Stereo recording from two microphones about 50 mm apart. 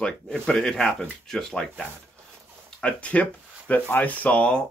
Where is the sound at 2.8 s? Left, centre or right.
Left.